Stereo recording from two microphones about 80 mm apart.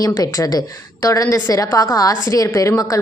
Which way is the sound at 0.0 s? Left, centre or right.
Left.